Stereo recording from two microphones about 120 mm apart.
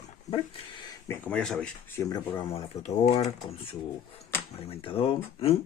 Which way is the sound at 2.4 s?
60° left (ahead or behind).